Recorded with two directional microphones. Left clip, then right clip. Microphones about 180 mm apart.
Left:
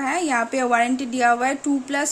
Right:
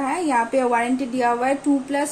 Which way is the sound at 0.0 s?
65° left (ahead or behind).